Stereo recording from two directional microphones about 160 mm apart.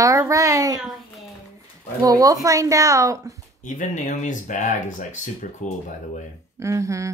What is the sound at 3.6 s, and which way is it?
Speech, 50° left (ahead or behind).